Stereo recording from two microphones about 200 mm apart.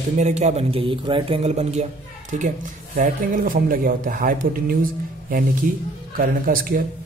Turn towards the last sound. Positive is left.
turn(degrees=-45)  # may be behind; listen again after turning